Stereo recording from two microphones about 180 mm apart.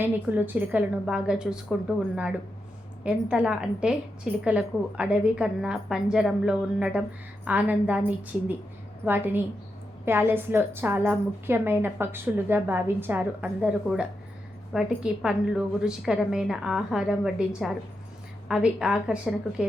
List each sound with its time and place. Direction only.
0.0 s a woman's voice: 10° right (ahead or behind)
3.0 s a woman's voice: 5° right (ahead or behind)
18.4 s a woman's voice: 5° right (ahead or behind)